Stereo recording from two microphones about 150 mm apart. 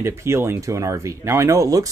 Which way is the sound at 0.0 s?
15° right (ahead or behind).